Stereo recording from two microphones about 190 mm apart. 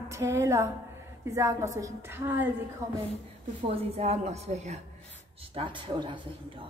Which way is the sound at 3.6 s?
35° right (ahead or behind).